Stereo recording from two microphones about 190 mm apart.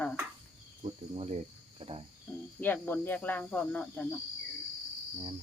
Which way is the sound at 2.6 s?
10° left (ahead or behind).